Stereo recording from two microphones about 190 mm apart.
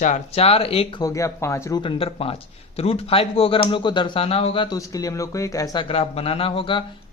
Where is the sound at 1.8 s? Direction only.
30° left (ahead or behind).